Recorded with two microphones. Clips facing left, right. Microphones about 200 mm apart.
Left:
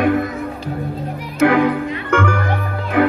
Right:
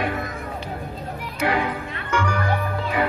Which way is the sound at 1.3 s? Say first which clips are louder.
Left 10 dB; 55° left (ahead or behind).